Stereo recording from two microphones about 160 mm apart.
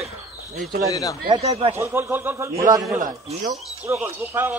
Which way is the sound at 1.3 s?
40° right (ahead or behind).